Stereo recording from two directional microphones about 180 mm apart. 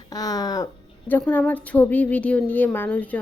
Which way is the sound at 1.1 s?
10° left (ahead or behind).